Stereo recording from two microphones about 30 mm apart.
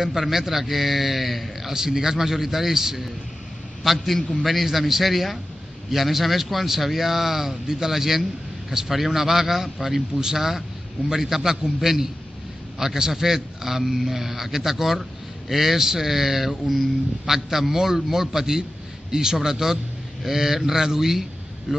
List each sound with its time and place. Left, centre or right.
0.0 s a man's voice: centre
1.7 s a man's voice: centre
3.8 s a man's voice: centre
18.4 s a man's voice: right